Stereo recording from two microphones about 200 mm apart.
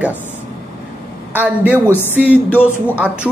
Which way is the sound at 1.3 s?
10° right (ahead or behind).